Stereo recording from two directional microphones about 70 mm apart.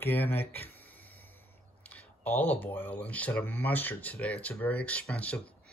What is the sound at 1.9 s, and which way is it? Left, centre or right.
Speech, left.